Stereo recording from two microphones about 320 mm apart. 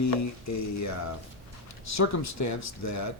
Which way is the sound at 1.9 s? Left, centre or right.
Left.